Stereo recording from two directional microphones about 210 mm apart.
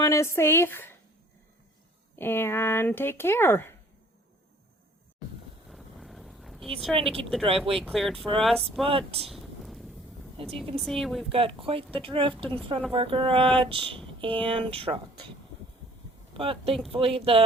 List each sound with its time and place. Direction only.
0.0 s speech: 15° left (ahead or behind)
2.1 s speech: 10° left (ahead or behind)
5.7 s vehicle: centre (ahead or behind)
6.9 s speech: centre (ahead or behind)
7.4 s speech: 25° right (ahead or behind)
7.8 s speech: centre (ahead or behind)
8.8 s speech: 25° right (ahead or behind)
9.3 s a sound: centre (ahead or behind)
10.4 s speech: 25° right (ahead or behind)
10.8 s speech: centre (ahead or behind)
11.3 s speech: 25° right (ahead or behind)
16.3 s speech: 25° right (ahead or behind)